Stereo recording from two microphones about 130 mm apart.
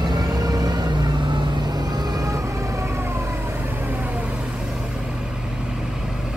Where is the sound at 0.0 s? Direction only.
30° right (ahead or behind).